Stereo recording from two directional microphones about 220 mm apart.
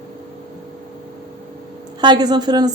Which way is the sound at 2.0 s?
20° right (ahead or behind).